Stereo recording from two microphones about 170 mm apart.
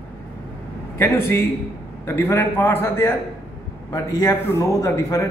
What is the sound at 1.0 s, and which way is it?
A man's voice, 15° left (ahead or behind).